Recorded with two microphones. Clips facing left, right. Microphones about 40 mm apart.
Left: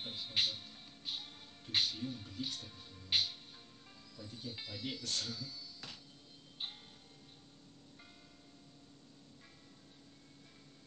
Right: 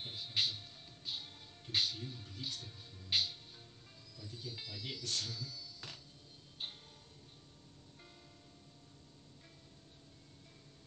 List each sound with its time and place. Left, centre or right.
0.1 s music: left
2.0 s speech: centre
3.2 s music: left
4.2 s speech: left
6.6 s music: centre